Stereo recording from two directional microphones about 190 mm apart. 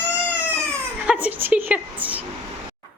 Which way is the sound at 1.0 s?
10° right (ahead or behind).